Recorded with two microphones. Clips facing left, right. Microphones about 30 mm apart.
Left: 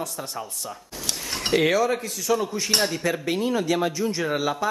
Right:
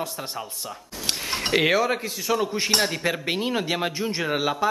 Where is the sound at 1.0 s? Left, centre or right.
Right.